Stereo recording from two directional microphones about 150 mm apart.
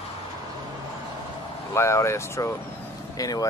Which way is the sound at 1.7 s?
20° left (ahead or behind).